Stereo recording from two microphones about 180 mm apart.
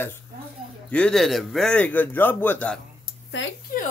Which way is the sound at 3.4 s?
90° left.